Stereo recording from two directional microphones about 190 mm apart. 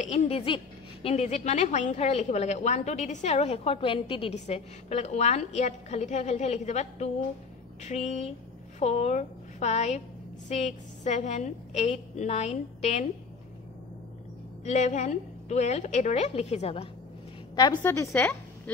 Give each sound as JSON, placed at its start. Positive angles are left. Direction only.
{"t": 0.0, "sound": "a woman's voice", "side_deg": 35}
{"t": 14.6, "sound": "a woman's voice", "side_deg": 35}
{"t": 17.6, "sound": "a woman's voice", "side_deg": 15}